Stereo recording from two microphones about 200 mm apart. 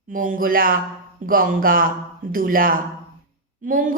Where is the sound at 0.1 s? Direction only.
45° right (ahead or behind).